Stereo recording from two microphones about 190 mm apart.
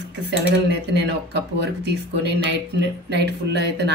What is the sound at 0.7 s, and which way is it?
Speech, 65° right (ahead or behind).